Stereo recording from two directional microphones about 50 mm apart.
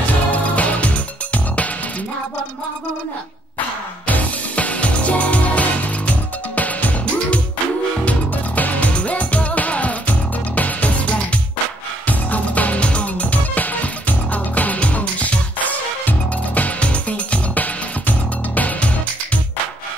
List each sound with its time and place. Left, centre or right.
0.3 s music: left
4.1 s music: left